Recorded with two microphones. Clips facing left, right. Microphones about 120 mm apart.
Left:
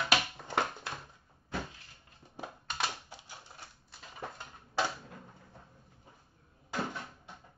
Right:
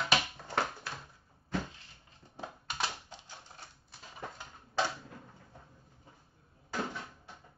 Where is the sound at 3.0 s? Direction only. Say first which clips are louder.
Even; 10° left (ahead or behind).